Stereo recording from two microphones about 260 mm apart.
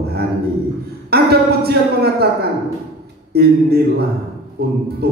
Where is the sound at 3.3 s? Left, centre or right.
Right.